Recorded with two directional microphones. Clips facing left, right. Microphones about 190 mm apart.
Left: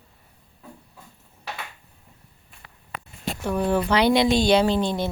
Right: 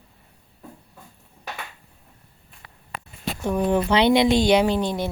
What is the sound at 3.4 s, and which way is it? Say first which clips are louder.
Speech: right 1 dB; 15° right (ahead or behind).